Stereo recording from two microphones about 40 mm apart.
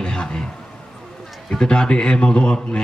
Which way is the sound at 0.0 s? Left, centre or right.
Left.